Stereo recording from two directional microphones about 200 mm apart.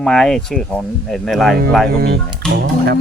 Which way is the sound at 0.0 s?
5° left (ahead or behind).